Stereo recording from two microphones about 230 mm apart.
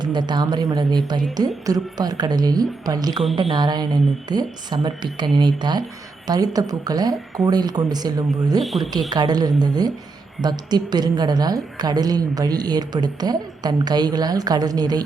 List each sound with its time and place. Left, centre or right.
0.0 s a woman's voice: centre
8.6 s speech: centre
9.0 s a woman's voice: centre